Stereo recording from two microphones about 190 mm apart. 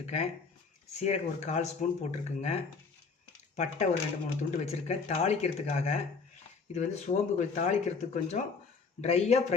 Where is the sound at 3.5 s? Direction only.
40° left (ahead or behind).